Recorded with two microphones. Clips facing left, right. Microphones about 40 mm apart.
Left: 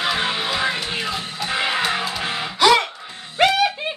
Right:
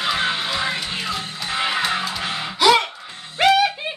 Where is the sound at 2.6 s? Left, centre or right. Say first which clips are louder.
Even; centre.